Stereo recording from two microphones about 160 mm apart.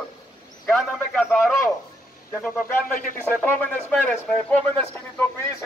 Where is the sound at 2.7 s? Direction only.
55° left (ahead or behind).